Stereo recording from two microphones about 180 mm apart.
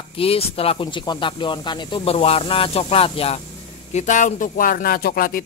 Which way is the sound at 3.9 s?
45° left (ahead or behind).